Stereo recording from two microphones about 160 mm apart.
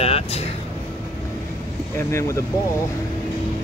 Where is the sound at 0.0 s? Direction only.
40° left (ahead or behind).